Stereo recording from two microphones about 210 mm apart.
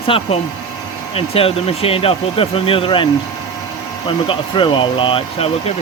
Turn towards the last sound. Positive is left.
turn(degrees=25)  # may be behind; listen again after turning